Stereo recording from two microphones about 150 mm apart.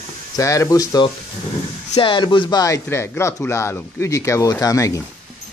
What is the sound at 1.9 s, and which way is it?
Speech, 35° left (ahead or behind).